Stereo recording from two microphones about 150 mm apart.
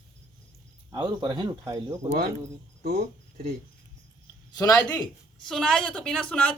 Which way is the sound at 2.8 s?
75° right (ahead or behind).